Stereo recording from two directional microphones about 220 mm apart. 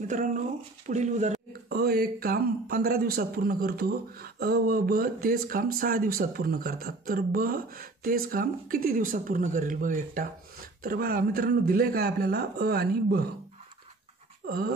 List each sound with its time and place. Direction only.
0.1 s speech: 35° right (ahead or behind)
14.4 s pant: 40° right (ahead or behind)